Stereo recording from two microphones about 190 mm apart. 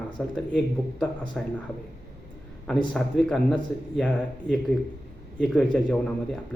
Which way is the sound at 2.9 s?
Centre (ahead or behind).